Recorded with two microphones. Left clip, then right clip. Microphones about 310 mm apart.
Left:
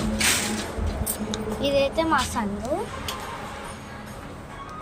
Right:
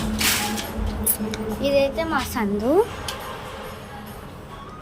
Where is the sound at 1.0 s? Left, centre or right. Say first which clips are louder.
Right 3 dB; centre.